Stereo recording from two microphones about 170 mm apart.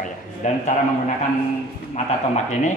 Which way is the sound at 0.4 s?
45° left (ahead or behind).